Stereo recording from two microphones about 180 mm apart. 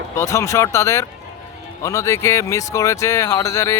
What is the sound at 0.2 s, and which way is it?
Speech, 15° left (ahead or behind).